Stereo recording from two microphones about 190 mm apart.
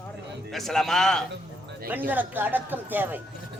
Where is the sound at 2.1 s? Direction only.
10° right (ahead or behind).